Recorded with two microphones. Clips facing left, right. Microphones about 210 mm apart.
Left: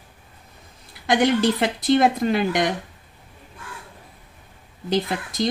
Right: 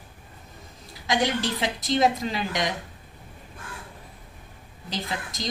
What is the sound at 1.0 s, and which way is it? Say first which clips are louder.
Speech: left 7 dB; 55° left (ahead or behind).